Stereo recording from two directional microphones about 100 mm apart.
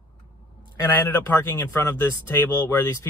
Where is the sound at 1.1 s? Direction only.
25° left (ahead or behind).